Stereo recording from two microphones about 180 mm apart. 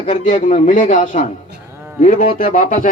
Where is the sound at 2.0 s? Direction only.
45° left (ahead or behind).